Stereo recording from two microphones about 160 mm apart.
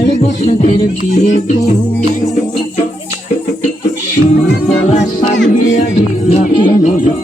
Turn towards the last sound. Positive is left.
turn(degrees=55)  # may be behind; listen again after turning